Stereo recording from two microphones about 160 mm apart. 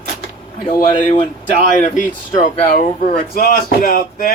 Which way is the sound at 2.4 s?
55° left (ahead or behind).